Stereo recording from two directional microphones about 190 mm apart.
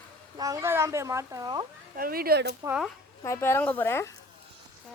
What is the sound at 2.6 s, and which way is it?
Speech, 5° right (ahead or behind).